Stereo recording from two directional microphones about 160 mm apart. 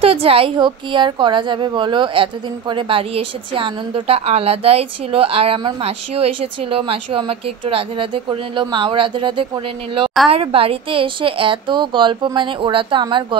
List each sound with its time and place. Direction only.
0.0 s a woman's voice: 35° right (ahead or behind)